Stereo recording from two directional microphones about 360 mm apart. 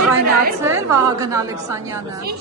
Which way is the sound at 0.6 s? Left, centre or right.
Centre.